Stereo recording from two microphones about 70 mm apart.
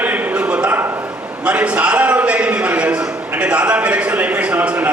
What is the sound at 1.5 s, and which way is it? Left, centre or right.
A man's voice, centre.